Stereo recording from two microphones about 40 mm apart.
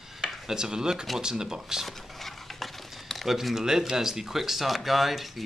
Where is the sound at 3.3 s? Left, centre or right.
Centre.